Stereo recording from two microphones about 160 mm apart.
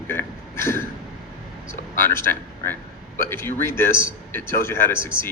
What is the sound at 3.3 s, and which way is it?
Speech, 15° left (ahead or behind).